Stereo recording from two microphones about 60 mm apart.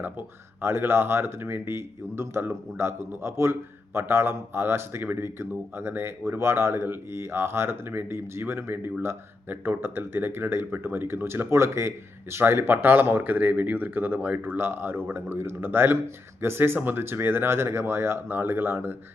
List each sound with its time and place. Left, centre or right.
0.0 s speech: right